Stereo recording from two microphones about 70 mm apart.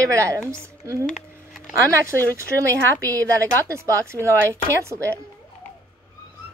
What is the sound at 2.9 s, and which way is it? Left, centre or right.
Speech, left.